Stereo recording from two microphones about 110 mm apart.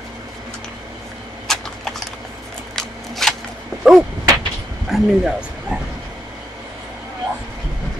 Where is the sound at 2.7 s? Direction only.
5° left (ahead or behind).